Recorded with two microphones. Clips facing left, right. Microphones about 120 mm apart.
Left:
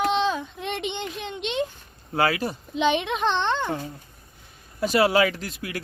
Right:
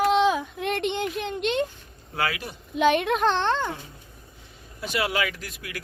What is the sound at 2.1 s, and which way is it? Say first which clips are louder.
Speech: left 6 dB; 35° left (ahead or behind).